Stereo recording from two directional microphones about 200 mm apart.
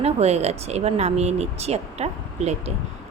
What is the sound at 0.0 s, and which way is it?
Speech, 30° right (ahead or behind).